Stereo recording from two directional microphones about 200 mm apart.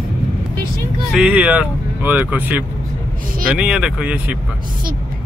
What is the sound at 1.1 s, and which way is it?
Speech, 5° right (ahead or behind).